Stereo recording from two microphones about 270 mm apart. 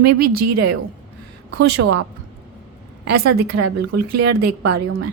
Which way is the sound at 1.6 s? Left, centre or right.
Right.